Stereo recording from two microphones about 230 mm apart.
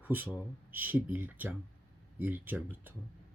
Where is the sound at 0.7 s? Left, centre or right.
Centre.